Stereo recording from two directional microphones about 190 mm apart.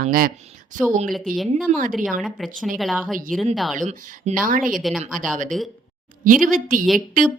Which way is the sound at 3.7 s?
40° right (ahead or behind).